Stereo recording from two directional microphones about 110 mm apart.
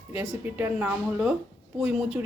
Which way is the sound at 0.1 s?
10° right (ahead or behind).